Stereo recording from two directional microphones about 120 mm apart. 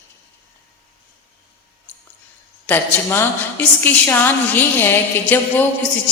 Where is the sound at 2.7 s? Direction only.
20° left (ahead or behind).